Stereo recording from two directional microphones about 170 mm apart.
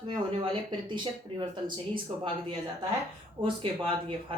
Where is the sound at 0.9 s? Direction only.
30° right (ahead or behind).